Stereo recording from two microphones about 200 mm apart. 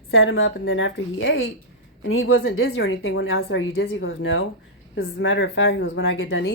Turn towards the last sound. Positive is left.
turn(degrees=80)